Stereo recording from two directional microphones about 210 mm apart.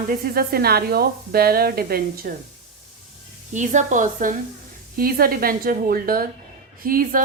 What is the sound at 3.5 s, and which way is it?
A woman's voice, 35° right (ahead or behind).